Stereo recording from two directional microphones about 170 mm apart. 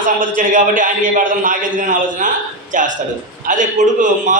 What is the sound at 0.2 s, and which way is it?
A man's voice, 50° right (ahead or behind).